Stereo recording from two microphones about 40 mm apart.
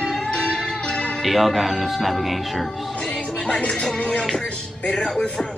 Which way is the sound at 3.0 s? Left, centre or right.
Left.